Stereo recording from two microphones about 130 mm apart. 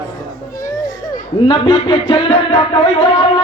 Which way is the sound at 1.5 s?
45° left (ahead or behind).